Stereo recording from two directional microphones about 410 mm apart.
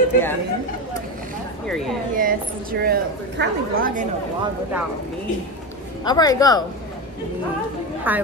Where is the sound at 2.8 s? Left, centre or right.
Right.